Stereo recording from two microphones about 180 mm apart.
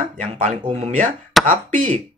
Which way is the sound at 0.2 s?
40° right (ahead or behind).